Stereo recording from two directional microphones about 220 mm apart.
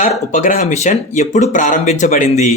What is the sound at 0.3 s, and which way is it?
Speech, 35° left (ahead or behind).